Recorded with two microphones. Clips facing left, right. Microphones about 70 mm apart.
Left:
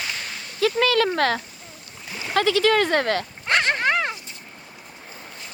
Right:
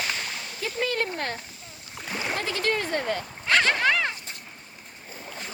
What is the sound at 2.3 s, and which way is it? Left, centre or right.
Speech, left.